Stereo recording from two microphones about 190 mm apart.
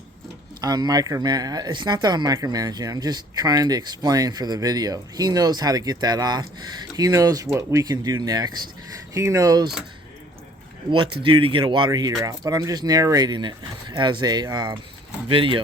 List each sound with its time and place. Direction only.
0.6 s speech: 20° right (ahead or behind)
10.9 s speech: 25° right (ahead or behind)